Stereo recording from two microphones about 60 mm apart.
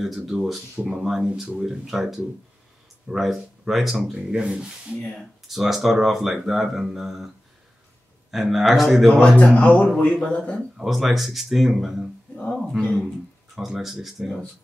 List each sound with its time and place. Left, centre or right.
0.0 s speech: centre
8.3 s speech: centre
9.1 s speech: centre
10.8 s speech: centre
12.5 s speech: centre
13.6 s speech: centre